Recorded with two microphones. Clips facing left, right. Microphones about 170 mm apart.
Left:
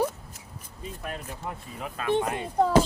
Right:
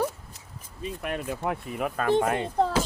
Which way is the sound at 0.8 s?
75° right (ahead or behind).